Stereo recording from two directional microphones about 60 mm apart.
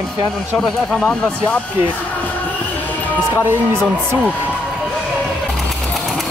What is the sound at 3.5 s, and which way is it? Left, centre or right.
Speech, right.